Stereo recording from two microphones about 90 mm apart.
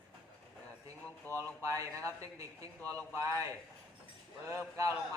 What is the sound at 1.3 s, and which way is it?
Speech, 35° right (ahead or behind).